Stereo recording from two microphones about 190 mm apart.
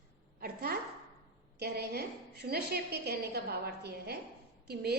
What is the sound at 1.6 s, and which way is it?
A woman's voice, 60° right (ahead or behind).